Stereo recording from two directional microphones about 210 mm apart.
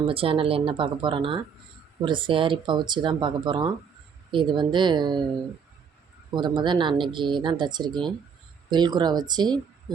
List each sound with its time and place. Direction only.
0.1 s speech: 25° right (ahead or behind)
6.3 s speech: 20° right (ahead or behind)